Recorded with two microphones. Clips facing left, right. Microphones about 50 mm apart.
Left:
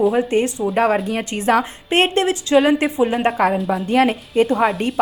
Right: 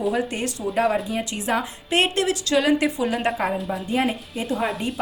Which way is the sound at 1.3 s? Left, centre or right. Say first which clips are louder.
Left 7 dB; left.